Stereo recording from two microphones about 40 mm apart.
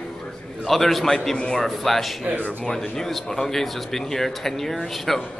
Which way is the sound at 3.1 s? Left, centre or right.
Centre.